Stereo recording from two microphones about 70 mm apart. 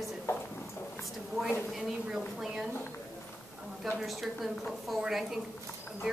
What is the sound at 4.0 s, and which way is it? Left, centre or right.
A woman's voice, centre.